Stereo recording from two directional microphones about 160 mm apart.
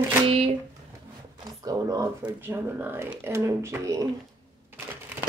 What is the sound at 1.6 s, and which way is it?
Speech, 20° right (ahead or behind).